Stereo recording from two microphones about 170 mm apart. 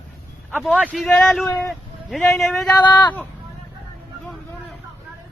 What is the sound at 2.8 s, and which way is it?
Speech, 25° left (ahead or behind).